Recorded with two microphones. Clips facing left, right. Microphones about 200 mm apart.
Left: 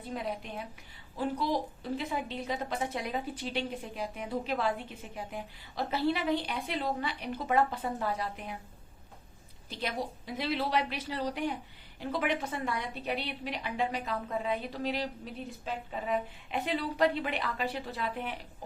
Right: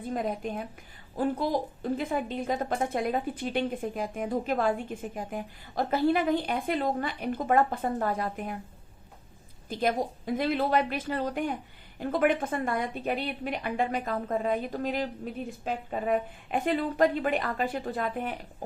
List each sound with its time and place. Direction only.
0.1 s a woman's voice: 45° right (ahead or behind)
9.6 s a woman's voice: 50° right (ahead or behind)